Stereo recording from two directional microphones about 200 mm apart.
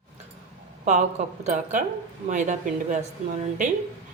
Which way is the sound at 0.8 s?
40° right (ahead or behind).